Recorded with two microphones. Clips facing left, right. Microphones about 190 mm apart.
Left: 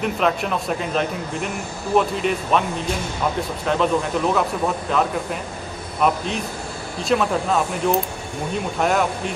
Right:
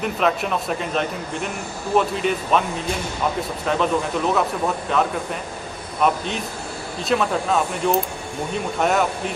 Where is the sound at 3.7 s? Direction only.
Centre (ahead or behind).